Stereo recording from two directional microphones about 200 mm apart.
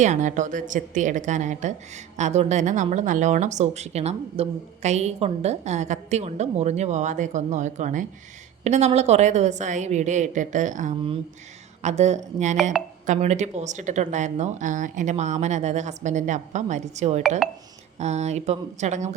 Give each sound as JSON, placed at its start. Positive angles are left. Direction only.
{"t": 0.0, "sound": "speech", "side_deg": -35}
{"t": 12.7, "sound": "speech", "side_deg": -5}
{"t": 13.1, "sound": "speech", "side_deg": -35}